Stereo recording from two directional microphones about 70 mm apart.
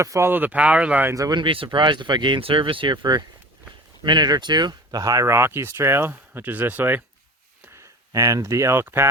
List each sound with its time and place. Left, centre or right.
0.0 s speech: right
0.3 s speech: right
1.3 s speech: right
5.3 s speech: right
7.7 s speech: right